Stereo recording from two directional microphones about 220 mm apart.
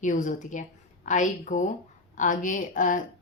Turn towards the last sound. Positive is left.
turn(degrees=35)  # may be behind; listen again after turning